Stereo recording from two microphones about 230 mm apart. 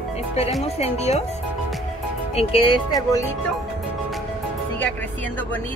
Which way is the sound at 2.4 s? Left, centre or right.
Left.